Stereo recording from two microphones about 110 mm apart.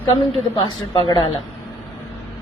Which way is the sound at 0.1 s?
50° left (ahead or behind).